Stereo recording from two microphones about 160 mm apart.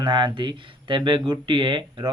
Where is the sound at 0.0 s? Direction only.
30° right (ahead or behind).